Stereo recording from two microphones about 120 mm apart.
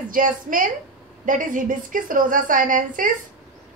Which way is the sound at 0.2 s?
90° right.